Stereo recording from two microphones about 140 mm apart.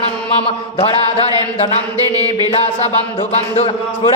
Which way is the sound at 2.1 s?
30° right (ahead or behind).